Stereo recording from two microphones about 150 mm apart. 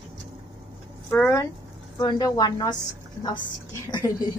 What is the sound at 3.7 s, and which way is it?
Speech, 25° left (ahead or behind).